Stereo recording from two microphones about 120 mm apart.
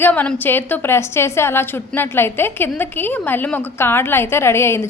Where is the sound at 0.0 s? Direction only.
15° left (ahead or behind).